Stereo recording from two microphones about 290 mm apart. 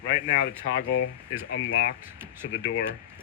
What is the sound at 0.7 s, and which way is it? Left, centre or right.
Speech, left.